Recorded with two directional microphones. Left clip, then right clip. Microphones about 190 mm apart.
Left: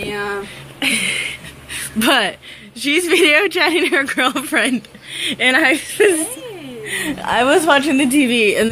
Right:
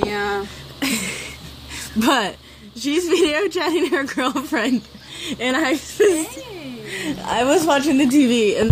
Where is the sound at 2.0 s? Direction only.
10° right (ahead or behind).